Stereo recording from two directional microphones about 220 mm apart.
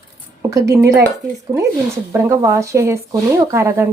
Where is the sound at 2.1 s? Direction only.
10° right (ahead or behind).